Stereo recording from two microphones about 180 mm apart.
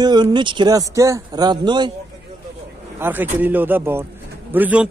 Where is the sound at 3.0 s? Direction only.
10° right (ahead or behind).